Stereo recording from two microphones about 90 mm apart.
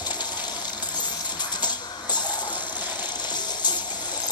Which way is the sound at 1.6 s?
55° left (ahead or behind).